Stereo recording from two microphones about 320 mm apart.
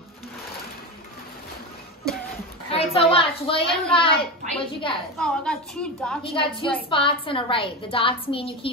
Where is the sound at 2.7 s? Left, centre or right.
Centre.